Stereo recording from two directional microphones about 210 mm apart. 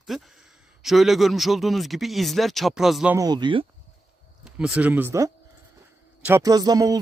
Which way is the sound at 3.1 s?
20° right (ahead or behind).